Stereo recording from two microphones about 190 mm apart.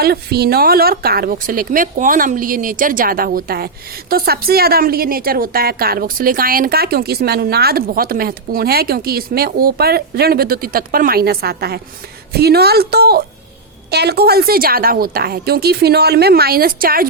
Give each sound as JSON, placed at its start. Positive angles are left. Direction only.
{"t": 0.0, "sound": "a woman's voice", "side_deg": -55}